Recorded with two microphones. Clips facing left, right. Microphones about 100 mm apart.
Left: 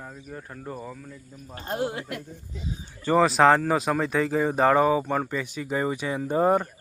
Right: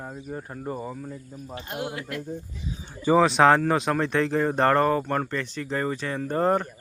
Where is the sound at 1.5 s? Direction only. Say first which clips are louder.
Left 4 dB; 35° left (ahead or behind).